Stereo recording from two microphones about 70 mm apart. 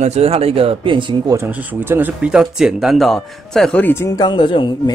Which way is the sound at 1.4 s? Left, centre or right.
Right.